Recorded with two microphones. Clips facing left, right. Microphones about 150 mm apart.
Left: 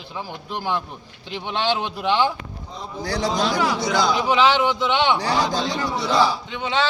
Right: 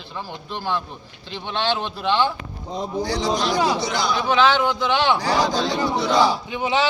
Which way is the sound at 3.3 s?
20° right (ahead or behind).